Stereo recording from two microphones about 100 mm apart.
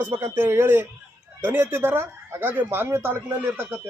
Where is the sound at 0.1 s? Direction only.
25° right (ahead or behind).